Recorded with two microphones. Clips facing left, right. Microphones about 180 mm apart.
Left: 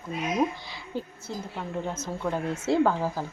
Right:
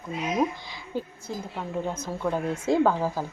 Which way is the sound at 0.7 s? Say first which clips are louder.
Right 2 dB; 15° right (ahead or behind).